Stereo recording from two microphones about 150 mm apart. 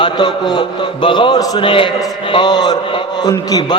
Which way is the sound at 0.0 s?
25° left (ahead or behind).